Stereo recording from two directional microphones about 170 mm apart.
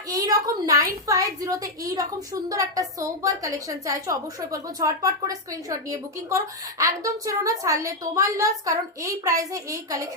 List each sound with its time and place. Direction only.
0.1 s a woman's voice: 20° right (ahead or behind)